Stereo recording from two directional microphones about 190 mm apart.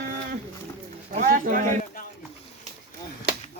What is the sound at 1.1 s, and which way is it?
Speech, 45° right (ahead or behind).